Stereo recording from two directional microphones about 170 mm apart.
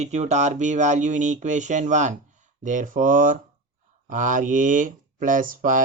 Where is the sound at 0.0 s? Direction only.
40° right (ahead or behind).